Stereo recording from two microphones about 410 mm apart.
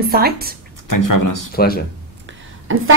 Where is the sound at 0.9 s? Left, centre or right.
Left.